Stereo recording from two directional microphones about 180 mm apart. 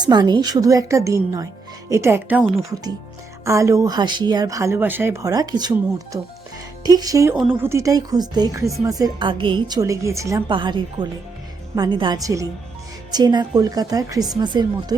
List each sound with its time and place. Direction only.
0.0 s speech: 25° right (ahead or behind)
10.5 s speech: 25° right (ahead or behind)